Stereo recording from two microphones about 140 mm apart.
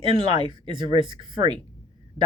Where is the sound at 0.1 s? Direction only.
35° right (ahead or behind).